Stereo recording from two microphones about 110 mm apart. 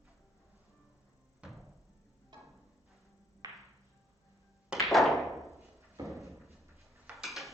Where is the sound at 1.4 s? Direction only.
10° right (ahead or behind).